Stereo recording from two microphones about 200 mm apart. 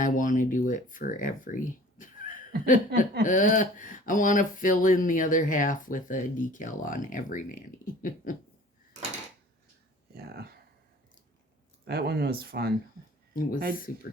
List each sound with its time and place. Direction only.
0.0 s speech: 40° left (ahead or behind)
10.2 s speech: 50° right (ahead or behind)
11.9 s speech: 50° right (ahead or behind)
13.3 s speech: 45° left (ahead or behind)